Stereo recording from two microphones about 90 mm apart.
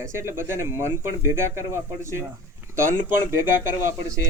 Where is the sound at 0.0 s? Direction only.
30° right (ahead or behind).